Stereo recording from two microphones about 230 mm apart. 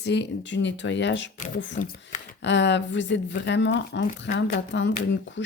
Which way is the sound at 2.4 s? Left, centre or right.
Left.